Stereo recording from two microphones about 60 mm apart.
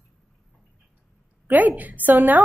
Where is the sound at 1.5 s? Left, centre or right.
Right.